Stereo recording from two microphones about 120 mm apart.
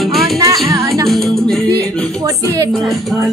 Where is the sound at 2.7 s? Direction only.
Centre (ahead or behind).